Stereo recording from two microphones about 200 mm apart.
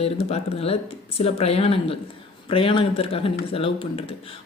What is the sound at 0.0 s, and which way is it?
Speech, 30° left (ahead or behind).